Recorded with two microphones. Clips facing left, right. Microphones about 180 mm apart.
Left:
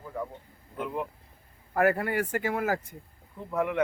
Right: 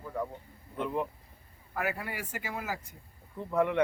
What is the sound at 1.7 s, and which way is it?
Speech, 55° left (ahead or behind).